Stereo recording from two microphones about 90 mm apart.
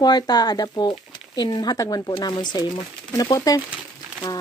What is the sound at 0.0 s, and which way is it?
Speech, 50° left (ahead or behind).